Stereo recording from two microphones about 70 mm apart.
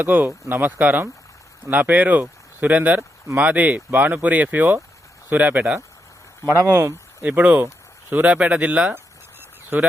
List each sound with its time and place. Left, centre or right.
0.0 s speech: right
6.5 s speech: right
7.3 s speech: right
9.4 s a sound: right